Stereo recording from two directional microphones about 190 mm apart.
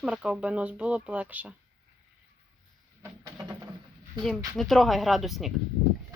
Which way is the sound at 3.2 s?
15° right (ahead or behind).